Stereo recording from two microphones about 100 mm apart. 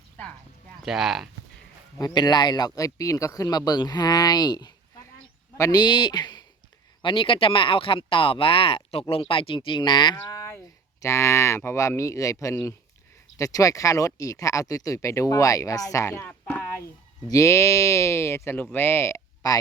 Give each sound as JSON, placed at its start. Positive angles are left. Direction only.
{"t": 0.8, "sound": "speech", "side_deg": -5}
{"t": 2.0, "sound": "speech", "side_deg": 40}
{"t": 5.7, "sound": "speech", "side_deg": 45}
{"t": 9.6, "sound": "speech", "side_deg": 50}
{"t": 10.2, "sound": "a sound", "side_deg": 30}
{"t": 11.0, "sound": "speech", "side_deg": 25}
{"t": 17.2, "sound": "speech", "side_deg": 30}